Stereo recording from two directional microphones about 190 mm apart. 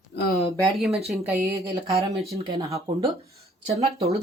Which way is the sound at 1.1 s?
10° right (ahead or behind).